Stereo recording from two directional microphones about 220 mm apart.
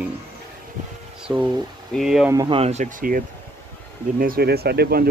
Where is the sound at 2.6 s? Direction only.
30° right (ahead or behind).